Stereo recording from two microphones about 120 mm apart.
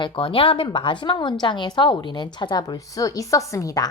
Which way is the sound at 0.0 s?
45° left (ahead or behind).